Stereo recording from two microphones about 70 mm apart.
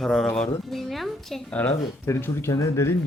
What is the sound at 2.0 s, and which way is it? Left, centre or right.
Speech, left.